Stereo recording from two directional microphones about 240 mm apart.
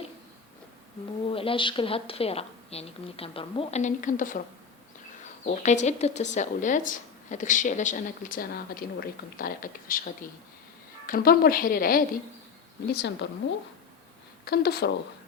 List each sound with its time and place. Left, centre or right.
1.3 s a woman's voice: left
5.5 s a woman's voice: left
11.0 s a woman's voice: left
14.4 s speech: left